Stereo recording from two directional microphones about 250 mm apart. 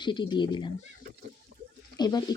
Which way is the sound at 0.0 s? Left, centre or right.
Centre.